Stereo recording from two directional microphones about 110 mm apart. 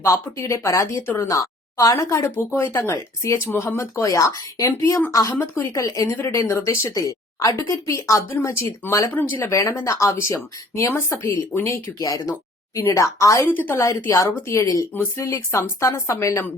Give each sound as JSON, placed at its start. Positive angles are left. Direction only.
{"t": 0.0, "sound": "a woman's voice", "side_deg": 30}
{"t": 13.5, "sound": "a woman's voice", "side_deg": 15}